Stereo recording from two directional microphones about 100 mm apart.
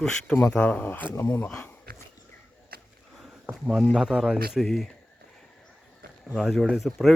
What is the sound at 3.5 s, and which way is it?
Speech, centre (ahead or behind).